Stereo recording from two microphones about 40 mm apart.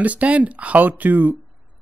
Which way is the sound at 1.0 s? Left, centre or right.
Right.